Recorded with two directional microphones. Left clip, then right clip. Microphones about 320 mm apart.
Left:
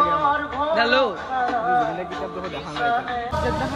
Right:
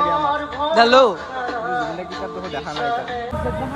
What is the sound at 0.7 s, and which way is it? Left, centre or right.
Speech, centre.